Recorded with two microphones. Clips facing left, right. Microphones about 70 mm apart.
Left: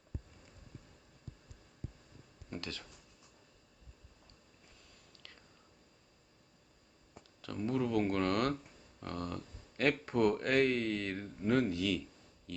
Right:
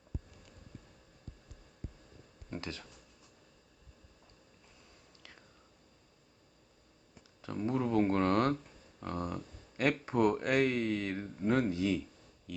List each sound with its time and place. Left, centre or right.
2.5 s a sound: right
7.4 s speech: right
9.0 s a sound: centre
10.1 s speech: centre
11.4 s speech: right
12.5 s speech: centre